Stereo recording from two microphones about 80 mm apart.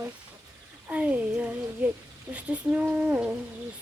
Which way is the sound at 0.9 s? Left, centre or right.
Centre.